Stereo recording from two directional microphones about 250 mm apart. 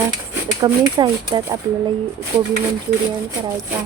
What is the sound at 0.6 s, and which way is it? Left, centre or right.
Speech, centre.